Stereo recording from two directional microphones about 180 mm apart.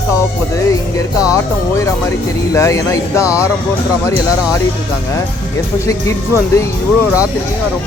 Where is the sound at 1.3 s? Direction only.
15° left (ahead or behind).